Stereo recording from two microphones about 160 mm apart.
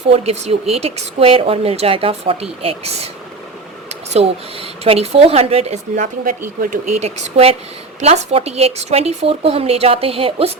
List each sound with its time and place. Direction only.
0.1 s speech: 40° right (ahead or behind)